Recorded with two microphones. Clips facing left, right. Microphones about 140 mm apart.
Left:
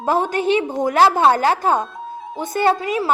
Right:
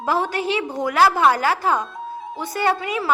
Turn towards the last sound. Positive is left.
turn(degrees=35)  # may be behind; listen again after turning